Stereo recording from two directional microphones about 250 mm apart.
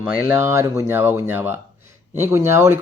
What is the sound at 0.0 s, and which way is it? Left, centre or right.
Speech, centre.